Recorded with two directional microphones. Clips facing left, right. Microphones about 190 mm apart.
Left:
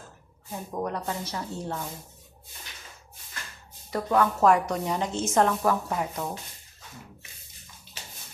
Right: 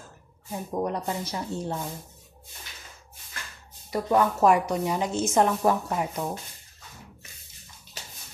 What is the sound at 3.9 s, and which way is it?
Speech, 15° right (ahead or behind).